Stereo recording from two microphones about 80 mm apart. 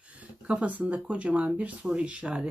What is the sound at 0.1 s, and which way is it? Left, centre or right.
Speech, centre.